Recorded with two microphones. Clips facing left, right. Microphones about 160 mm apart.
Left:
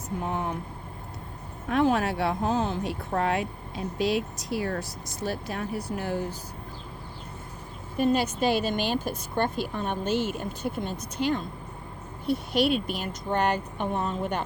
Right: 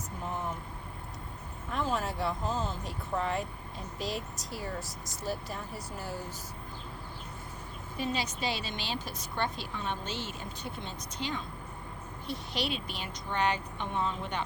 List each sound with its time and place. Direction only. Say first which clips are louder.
1.6 s speech: left 9 dB; 70° left (ahead or behind)
7.9 s a woman's voice: left 10 dB; 50° left (ahead or behind)